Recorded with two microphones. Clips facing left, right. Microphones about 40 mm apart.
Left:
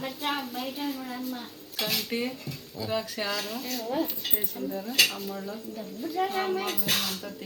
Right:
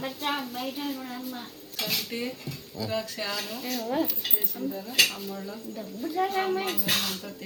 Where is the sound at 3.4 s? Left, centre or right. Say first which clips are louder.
Even; centre.